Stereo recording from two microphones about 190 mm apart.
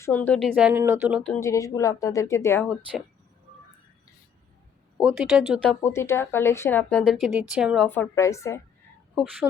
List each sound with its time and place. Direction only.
0.0 s speech: 10° left (ahead or behind)
0.5 s speech: 5° right (ahead or behind)
1.2 s speech: 10° left (ahead or behind)
4.9 s speech: 5° right (ahead or behind)
5.8 s speech: 15° left (ahead or behind)
7.0 s speech: centre (ahead or behind)
7.9 s speech: 15° left (ahead or behind)
9.1 s speech: 5° right (ahead or behind)